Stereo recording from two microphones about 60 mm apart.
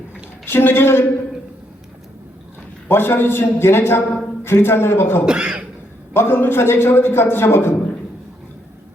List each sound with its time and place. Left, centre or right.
0.4 s a man's voice: left
2.9 s a man's voice: left
5.2 s speech: centre
6.1 s a man's voice: left